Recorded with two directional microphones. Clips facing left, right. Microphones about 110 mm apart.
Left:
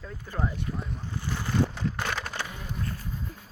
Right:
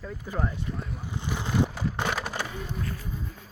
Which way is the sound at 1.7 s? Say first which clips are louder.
Right 2 dB; 10° right (ahead or behind).